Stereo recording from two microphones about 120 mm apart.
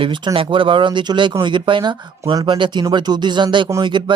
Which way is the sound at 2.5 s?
40° right (ahead or behind).